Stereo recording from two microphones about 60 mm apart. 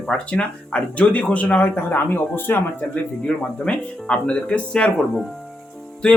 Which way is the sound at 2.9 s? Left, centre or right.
Centre.